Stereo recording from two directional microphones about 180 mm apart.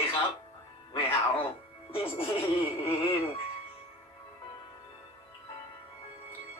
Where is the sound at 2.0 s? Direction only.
30° left (ahead or behind).